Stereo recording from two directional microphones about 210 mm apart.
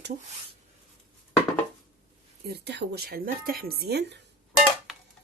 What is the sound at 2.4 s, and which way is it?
Speech, 50° right (ahead or behind).